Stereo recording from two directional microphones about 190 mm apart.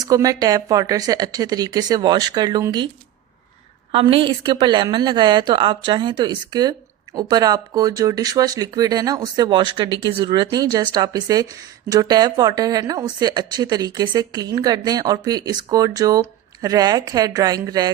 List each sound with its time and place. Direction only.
0.0 s a woman's voice: 20° right (ahead or behind)
3.9 s a woman's voice: 30° right (ahead or behind)